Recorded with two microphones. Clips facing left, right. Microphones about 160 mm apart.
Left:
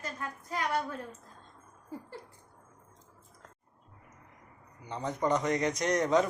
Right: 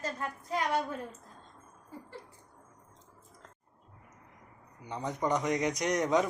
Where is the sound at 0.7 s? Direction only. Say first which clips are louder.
Even; 15° right (ahead or behind).